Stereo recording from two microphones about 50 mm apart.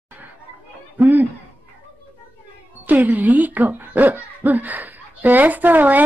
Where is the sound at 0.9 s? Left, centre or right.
Right.